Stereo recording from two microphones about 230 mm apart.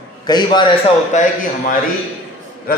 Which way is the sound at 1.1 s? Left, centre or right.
Left.